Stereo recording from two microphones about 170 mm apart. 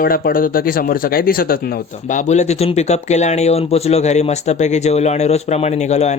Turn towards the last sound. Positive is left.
turn(degrees=40)  # may be behind; listen again after turning